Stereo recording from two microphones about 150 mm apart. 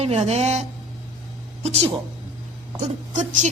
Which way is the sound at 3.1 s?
55° right (ahead or behind).